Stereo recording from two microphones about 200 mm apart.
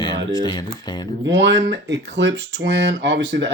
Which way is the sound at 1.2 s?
60° right (ahead or behind).